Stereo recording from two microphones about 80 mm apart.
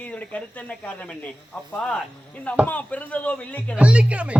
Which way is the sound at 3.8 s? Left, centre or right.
Centre.